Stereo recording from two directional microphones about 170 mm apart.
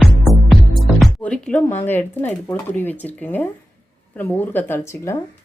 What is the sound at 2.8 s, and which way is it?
Speech, 10° left (ahead or behind).